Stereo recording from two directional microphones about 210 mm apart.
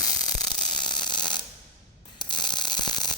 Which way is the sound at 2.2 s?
20° left (ahead or behind).